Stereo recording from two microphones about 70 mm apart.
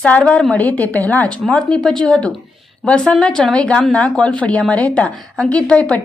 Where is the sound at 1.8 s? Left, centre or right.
Centre.